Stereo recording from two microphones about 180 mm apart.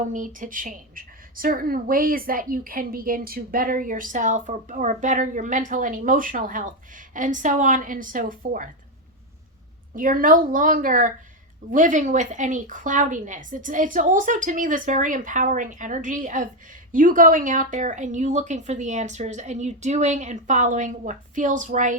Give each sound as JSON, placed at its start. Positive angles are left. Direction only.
{"t": 0.0, "sound": "a woman's voice", "side_deg": -45}
{"t": 9.9, "sound": "a woman's voice", "side_deg": -50}